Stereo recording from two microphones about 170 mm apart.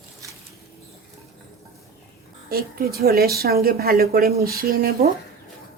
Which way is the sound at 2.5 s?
65° right (ahead or behind).